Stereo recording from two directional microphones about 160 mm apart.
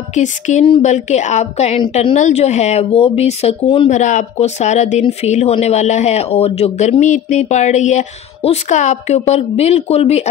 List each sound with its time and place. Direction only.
0.1 s speech: 50° left (ahead or behind)
3.9 s speech: 50° left (ahead or behind)